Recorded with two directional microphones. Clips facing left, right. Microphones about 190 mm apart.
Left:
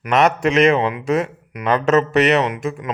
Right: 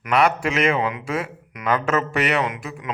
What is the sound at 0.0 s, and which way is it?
A man's voice, 45° left (ahead or behind).